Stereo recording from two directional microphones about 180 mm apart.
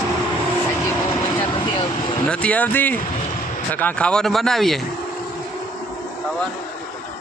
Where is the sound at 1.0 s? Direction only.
30° left (ahead or behind).